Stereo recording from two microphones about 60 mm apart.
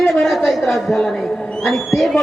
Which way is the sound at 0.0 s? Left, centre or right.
Centre.